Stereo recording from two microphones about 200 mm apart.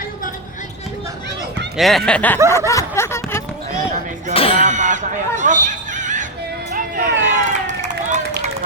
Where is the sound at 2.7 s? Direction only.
15° left (ahead or behind).